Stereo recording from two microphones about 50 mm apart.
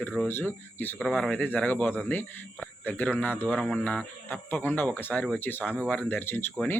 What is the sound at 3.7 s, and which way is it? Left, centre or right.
Speech, left.